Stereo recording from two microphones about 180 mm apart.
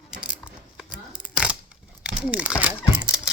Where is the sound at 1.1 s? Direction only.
5° right (ahead or behind).